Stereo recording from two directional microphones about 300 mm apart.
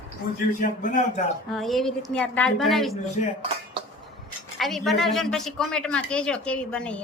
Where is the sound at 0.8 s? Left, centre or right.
Left.